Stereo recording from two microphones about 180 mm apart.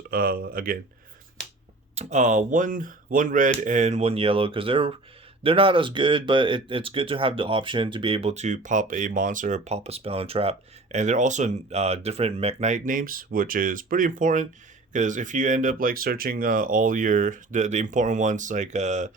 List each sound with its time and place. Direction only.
0.1 s speech: 60° right (ahead or behind)
2.0 s speech: 40° right (ahead or behind)